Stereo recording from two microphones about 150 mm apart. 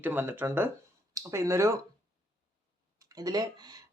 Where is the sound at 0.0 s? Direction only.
15° right (ahead or behind).